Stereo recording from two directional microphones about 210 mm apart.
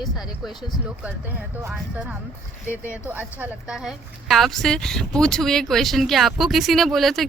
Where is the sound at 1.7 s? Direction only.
5° right (ahead or behind).